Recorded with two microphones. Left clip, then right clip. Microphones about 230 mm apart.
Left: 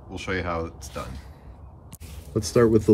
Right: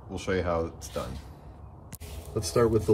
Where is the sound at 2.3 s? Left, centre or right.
Centre.